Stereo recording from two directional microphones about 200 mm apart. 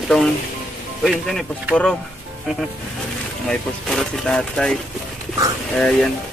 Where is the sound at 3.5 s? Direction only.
5° left (ahead or behind).